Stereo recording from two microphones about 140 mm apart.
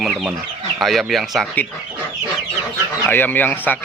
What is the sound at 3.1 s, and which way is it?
Speech, 15° left (ahead or behind).